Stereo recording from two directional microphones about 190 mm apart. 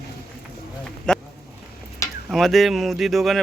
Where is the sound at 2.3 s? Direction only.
Centre (ahead or behind).